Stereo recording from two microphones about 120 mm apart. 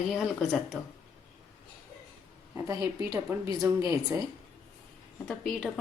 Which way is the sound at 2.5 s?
25° right (ahead or behind).